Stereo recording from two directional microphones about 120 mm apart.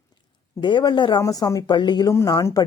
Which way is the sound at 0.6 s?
40° left (ahead or behind).